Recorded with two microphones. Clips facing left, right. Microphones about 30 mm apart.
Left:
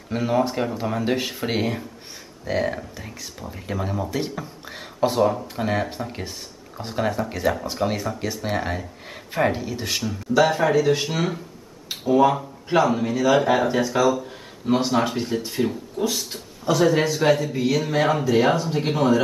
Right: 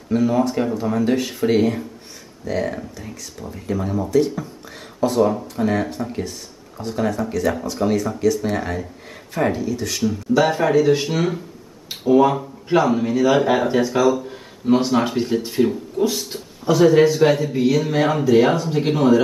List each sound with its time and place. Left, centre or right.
0.1 s speech: left
5.2 s speech: centre
5.6 s speech: centre
7.7 s speech: left
10.0 s speech: centre